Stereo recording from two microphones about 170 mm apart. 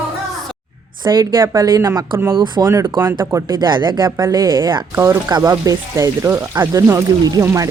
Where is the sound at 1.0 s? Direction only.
20° right (ahead or behind).